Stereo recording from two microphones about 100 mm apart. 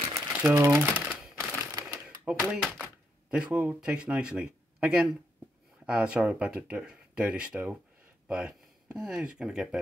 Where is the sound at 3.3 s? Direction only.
10° right (ahead or behind).